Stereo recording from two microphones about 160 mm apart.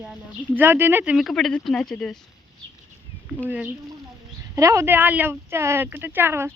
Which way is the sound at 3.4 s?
10° right (ahead or behind).